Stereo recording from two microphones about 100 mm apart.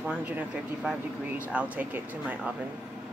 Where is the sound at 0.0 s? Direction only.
15° right (ahead or behind).